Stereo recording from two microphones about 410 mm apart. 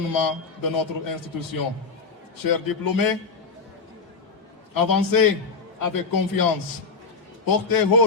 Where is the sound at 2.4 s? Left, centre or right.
Left.